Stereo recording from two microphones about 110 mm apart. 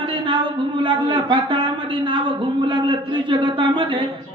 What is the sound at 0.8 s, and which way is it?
Speech, 45° right (ahead or behind).